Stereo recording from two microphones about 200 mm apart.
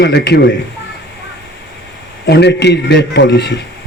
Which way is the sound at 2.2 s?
55° left (ahead or behind).